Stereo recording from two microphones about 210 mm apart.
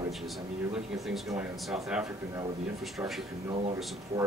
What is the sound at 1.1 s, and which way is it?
Speech, 5° right (ahead or behind).